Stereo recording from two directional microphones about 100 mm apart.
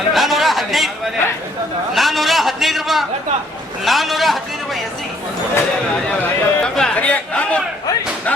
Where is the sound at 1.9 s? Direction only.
Centre (ahead or behind).